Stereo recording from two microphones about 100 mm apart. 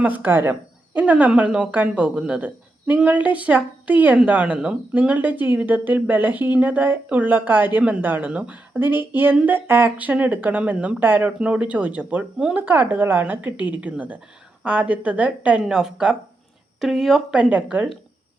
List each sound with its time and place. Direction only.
0.0 s a woman's voice: 15° right (ahead or behind)
17.5 s speech: 15° right (ahead or behind)